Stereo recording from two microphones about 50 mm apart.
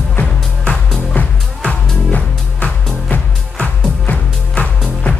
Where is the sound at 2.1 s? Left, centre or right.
Left.